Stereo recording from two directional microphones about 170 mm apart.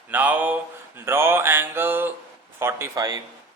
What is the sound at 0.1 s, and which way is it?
Mantra, 10° right (ahead or behind).